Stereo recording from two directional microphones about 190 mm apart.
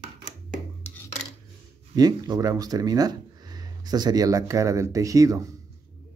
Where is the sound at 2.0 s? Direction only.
20° right (ahead or behind).